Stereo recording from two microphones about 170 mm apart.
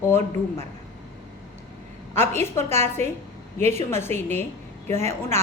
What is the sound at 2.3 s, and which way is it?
A woman's voice, 15° left (ahead or behind).